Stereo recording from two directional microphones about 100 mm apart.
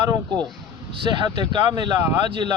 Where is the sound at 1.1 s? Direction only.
50° right (ahead or behind).